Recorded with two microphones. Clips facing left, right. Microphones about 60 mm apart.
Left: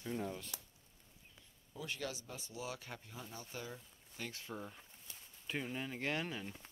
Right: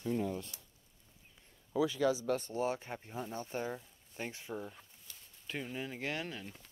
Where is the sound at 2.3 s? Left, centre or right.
Right.